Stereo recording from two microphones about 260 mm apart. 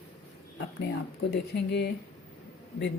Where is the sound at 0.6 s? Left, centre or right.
Left.